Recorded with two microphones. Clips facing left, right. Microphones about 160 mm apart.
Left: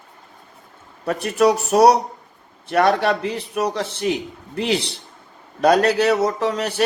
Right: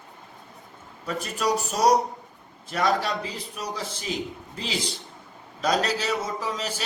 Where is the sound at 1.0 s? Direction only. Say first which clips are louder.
Left 9 dB; 65° left (ahead or behind).